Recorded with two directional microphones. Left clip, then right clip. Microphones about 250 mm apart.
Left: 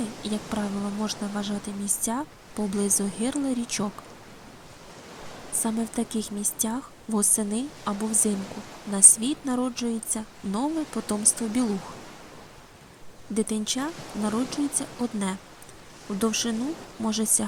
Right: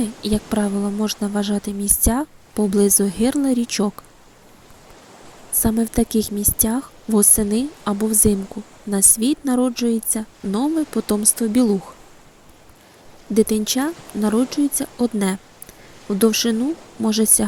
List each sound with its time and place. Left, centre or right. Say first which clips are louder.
0.2 s a woman's voice: right 10 dB; centre
5.5 s a woman's voice: right 9 dB; right
13.3 s a woman's voice: right 10 dB; centre